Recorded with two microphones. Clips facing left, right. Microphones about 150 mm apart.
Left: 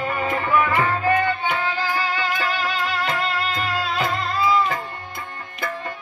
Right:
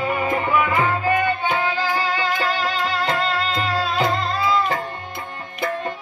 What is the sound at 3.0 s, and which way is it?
Music, 30° right (ahead or behind).